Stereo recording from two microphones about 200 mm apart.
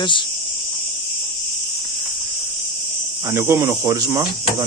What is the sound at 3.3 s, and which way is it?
Cricket, 15° right (ahead or behind).